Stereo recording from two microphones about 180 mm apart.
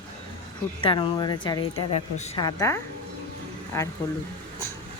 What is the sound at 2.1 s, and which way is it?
Speech, 40° left (ahead or behind).